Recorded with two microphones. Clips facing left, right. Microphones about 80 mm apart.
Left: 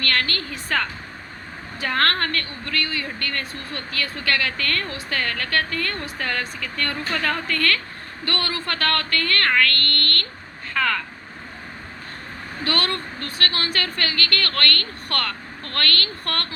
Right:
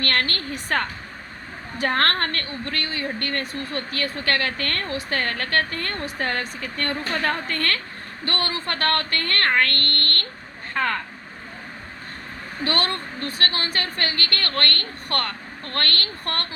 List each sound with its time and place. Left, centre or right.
0.0 s speech: right
12.6 s a woman's voice: right